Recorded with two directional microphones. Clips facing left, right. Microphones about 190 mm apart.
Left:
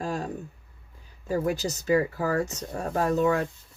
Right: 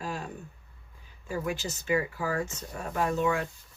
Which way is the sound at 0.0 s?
40° left (ahead or behind).